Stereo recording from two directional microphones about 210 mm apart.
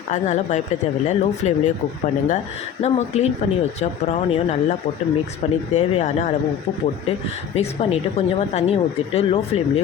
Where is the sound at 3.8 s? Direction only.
30° left (ahead or behind).